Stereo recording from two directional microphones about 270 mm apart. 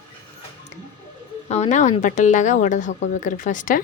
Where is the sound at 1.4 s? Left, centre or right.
Left.